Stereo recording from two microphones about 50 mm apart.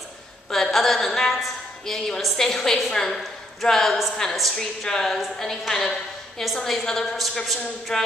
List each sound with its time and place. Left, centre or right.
0.5 s a woman's voice: centre